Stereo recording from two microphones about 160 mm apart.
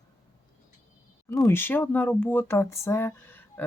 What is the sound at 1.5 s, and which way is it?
Speech, 15° left (ahead or behind).